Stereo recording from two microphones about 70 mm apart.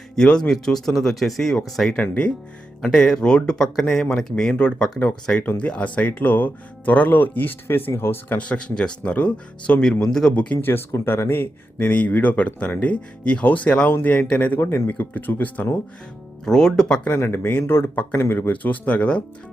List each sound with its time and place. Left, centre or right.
0.2 s speech: centre
2.0 s speech: centre
2.8 s speech: centre
4.5 s speech: centre; by 8.4 s left
8.4 s speech: centre
9.8 s speech: centre
10.3 s speech: centre
10.7 s speech: left
16.5 s speech: centre
17.1 s speech: left; by 19.2 s centre